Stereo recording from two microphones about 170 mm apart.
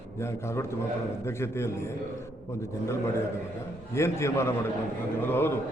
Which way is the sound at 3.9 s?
15° left (ahead or behind).